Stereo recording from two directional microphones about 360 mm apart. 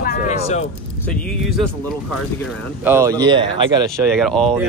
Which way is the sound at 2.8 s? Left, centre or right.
Centre.